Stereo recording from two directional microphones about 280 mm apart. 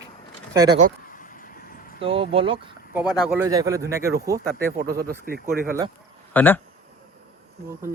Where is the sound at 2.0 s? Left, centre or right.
Centre.